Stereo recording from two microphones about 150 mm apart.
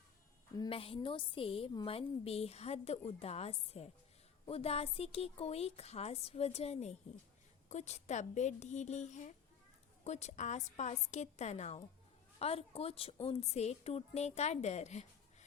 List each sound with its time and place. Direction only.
0.7 s a woman's voice: 40° left (ahead or behind)